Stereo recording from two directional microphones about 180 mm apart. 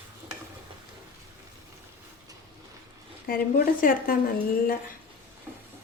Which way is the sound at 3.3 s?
55° left (ahead or behind).